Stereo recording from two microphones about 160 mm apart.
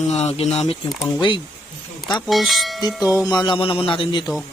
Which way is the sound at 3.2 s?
25° left (ahead or behind).